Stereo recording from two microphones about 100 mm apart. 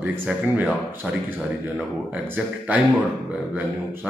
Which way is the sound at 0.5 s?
15° right (ahead or behind).